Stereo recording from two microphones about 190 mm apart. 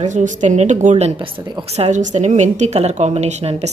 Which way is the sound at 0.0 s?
40° right (ahead or behind).